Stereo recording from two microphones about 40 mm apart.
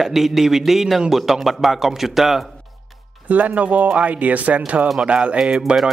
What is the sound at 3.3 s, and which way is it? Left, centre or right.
Speech, right.